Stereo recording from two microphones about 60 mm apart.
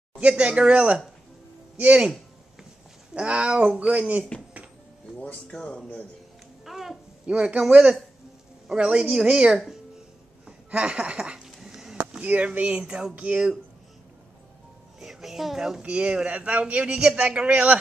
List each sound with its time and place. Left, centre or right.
0.2 s a man's voice: centre
3.2 s a man's voice: centre
5.5 s speech: centre
6.6 s a sound: centre
8.7 s speech: centre
11.6 s a sound: centre
12.1 s a man's voice: right
13.1 s a man's voice: right
15.0 s a woman's voice: centre
15.8 s a man's voice: centre